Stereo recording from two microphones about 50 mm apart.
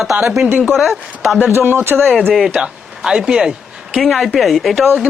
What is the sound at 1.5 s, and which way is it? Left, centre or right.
Speech, right.